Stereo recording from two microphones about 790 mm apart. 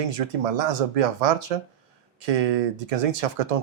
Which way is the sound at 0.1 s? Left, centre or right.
Right.